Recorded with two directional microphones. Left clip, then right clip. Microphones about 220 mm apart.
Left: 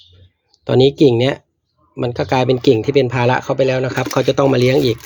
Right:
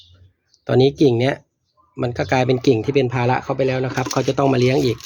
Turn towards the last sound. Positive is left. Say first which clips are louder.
# left 3 dB
turn(degrees=5)  # may be behind; listen again after turning